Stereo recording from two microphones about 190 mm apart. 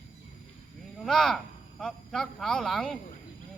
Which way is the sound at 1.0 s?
Centre (ahead or behind).